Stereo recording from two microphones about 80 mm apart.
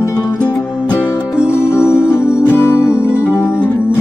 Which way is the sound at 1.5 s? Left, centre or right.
Left.